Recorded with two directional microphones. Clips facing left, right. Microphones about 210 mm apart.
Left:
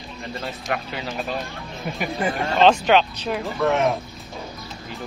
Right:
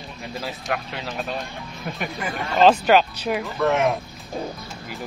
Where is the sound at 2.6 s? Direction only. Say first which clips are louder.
Right 1 dB; 5° right (ahead or behind).